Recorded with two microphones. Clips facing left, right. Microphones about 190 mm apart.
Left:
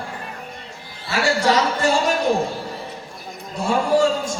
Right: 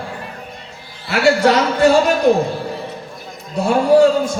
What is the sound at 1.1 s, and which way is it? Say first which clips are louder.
Speech: right 5 dB; 65° right (ahead or behind).